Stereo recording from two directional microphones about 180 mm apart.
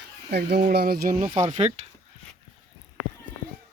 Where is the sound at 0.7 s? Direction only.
60° right (ahead or behind).